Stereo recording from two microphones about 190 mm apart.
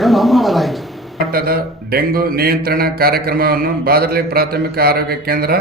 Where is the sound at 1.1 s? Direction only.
50° right (ahead or behind).